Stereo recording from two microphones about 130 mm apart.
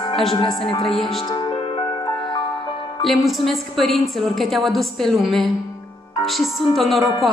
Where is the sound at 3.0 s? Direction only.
Centre (ahead or behind).